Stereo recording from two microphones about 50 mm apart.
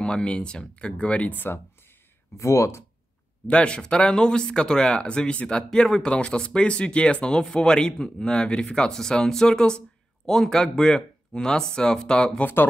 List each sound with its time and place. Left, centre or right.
0.0 s speech: centre
2.3 s speech: left
3.4 s speech: centre